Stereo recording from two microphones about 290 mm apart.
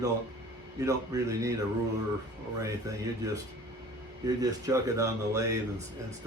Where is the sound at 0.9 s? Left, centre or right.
Centre.